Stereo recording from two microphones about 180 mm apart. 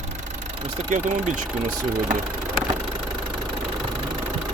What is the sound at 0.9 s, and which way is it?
Speech, 45° right (ahead or behind).